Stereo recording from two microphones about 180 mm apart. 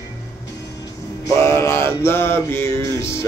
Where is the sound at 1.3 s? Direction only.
15° left (ahead or behind).